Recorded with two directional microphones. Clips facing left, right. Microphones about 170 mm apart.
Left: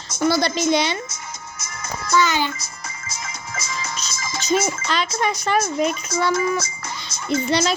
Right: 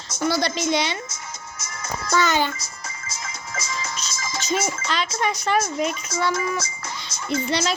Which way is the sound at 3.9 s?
35° left (ahead or behind).